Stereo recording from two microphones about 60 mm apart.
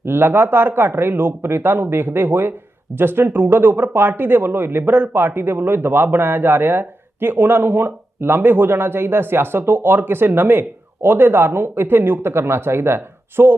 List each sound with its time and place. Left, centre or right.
0.0 s speech: right